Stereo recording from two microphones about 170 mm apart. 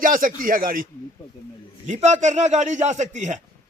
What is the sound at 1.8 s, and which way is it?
A man's voice, 45° right (ahead or behind).